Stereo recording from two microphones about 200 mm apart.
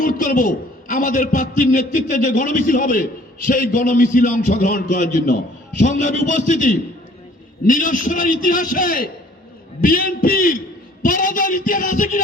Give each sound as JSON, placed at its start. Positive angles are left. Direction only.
{"t": 0.0, "sound": "a man's voice", "side_deg": 40}